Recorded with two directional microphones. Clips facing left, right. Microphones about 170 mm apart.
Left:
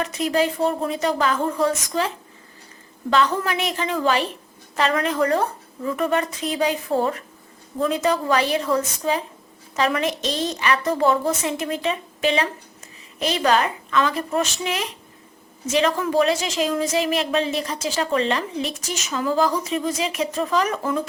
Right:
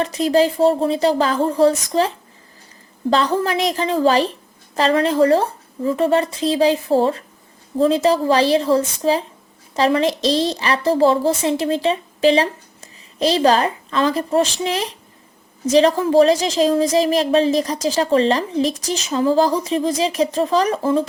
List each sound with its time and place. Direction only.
0.0 s a woman's voice: 35° right (ahead or behind)